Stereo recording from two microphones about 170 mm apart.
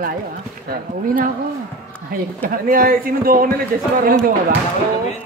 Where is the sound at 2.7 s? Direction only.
55° right (ahead or behind).